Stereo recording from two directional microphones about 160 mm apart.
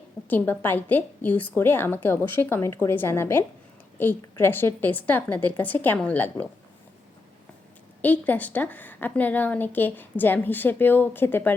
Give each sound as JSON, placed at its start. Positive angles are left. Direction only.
{"t": 0.3, "sound": "a woman's voice", "side_deg": 10}
{"t": 8.0, "sound": "a woman's voice", "side_deg": 10}